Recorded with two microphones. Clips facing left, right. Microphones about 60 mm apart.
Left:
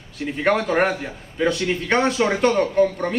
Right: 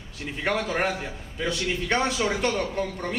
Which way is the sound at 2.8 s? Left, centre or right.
Centre.